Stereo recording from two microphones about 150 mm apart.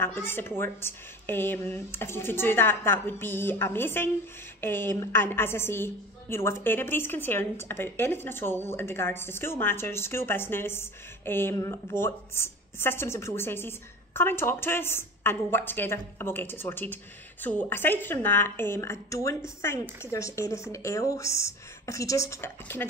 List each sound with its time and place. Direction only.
0.0 s a woman's voice: 15° left (ahead or behind)